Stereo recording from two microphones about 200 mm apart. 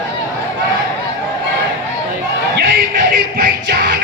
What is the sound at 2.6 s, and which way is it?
Music, 55° right (ahead or behind).